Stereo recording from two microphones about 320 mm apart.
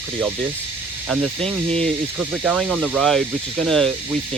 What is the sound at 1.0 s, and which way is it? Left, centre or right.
Speech, centre.